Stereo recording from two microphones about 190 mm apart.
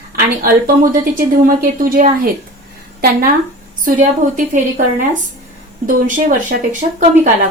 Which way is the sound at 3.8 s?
40° right (ahead or behind).